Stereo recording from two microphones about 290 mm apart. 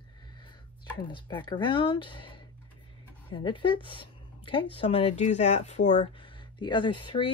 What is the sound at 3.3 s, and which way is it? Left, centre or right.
A woman's voice, centre.